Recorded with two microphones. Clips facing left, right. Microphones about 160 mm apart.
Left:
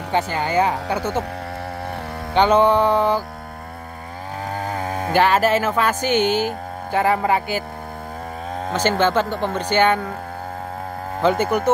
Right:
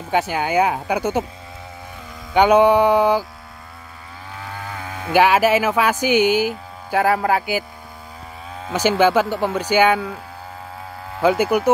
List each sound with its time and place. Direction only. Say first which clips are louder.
0.3 s speech: right 1 dB; 10° right (ahead or behind)
2.3 s speech: right 2 dB; 10° right (ahead or behind)
4.5 s a sound: left 6 dB; 40° left (ahead or behind)
5.1 s speech: right 2 dB; 10° right (ahead or behind)
8.7 s speech: right 3 dB; 10° right (ahead or behind)
11.5 s speech: right 2 dB; 10° right (ahead or behind)